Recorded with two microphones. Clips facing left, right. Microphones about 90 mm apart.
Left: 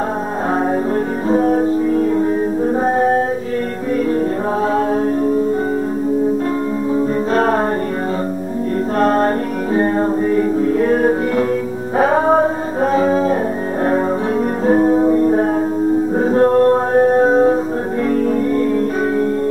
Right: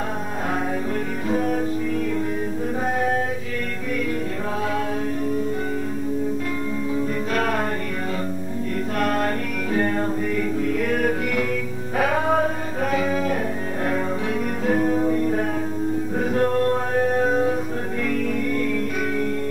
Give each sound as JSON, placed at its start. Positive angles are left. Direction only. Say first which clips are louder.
{"t": 1.3, "sound": "music", "louder": "left 9 dB", "side_deg": 35}
{"t": 7.0, "sound": "music", "louder": "left 8 dB", "side_deg": 35}
{"t": 9.0, "sound": "music", "louder": "left 8 dB", "side_deg": 35}
{"t": 14.7, "sound": "music", "louder": "left 8 dB", "side_deg": 30}